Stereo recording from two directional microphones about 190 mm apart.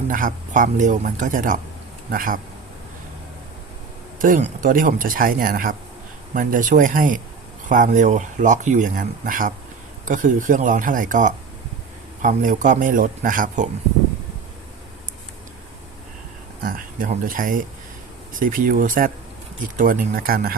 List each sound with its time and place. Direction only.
0.1 s speech: 45° right (ahead or behind)
4.2 s speech: 45° right (ahead or behind)
16.6 s speech: 45° right (ahead or behind)